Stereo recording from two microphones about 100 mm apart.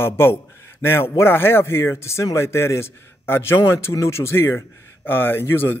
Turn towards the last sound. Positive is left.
turn(degrees=20)  # may be behind; listen again after turning